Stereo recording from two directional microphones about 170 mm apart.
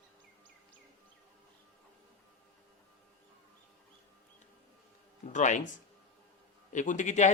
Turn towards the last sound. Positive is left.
turn(degrees=45)  # may be behind; listen again after turning